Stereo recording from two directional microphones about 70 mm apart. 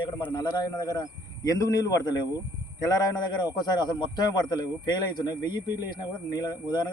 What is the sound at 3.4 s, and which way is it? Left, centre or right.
Speech, left.